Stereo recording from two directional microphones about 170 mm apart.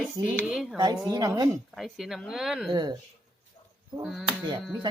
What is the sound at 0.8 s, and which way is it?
Speech, 25° right (ahead or behind).